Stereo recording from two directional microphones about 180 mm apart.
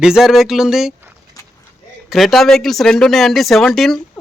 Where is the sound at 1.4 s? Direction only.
20° left (ahead or behind).